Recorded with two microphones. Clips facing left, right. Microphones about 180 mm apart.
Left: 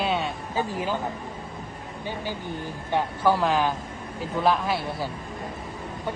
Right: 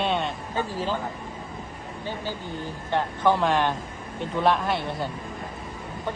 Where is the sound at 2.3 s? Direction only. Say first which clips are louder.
Even; 15° left (ahead or behind).